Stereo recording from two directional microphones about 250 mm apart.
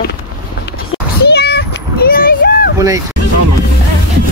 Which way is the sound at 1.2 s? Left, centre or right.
Left.